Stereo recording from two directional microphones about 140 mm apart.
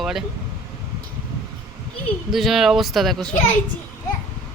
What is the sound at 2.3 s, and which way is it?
Speech, centre (ahead or behind).